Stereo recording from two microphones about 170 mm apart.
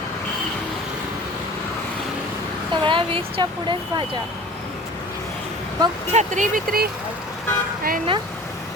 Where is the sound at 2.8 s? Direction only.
30° right (ahead or behind).